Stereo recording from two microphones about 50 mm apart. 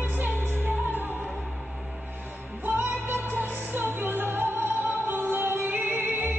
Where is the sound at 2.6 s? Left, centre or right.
Right.